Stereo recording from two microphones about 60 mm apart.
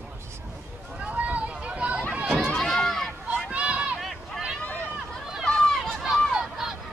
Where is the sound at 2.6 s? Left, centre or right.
Centre.